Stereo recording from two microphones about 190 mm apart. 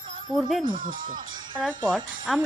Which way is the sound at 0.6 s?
45° right (ahead or behind).